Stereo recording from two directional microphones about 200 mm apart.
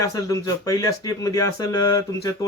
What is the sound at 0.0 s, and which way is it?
Speech, 15° left (ahead or behind).